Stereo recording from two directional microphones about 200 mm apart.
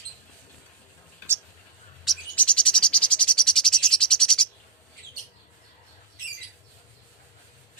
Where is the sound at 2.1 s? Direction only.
5° left (ahead or behind).